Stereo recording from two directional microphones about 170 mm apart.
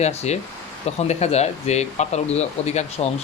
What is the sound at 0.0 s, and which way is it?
Speech, 40° left (ahead or behind).